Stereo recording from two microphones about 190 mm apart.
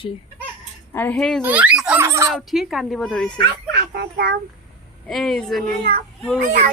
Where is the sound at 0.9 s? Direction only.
10° left (ahead or behind).